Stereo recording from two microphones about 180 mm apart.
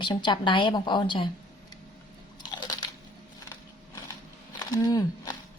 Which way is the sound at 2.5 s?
25° left (ahead or behind).